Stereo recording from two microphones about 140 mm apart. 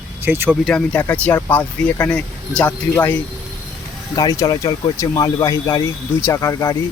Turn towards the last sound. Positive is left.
turn(degrees=25)  # may be behind; listen again after turning